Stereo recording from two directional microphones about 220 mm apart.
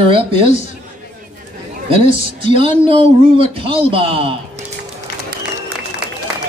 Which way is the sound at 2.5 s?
25° right (ahead or behind).